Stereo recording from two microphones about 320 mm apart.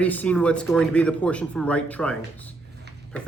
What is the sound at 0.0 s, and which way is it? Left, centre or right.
Speech, centre.